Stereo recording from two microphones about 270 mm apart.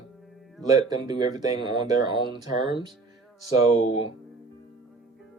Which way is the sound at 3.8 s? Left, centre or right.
Left.